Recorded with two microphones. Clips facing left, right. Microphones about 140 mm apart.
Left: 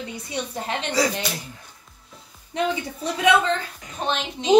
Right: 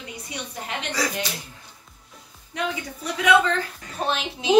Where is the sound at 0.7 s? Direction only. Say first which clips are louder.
Left 4 dB; 30° left (ahead or behind).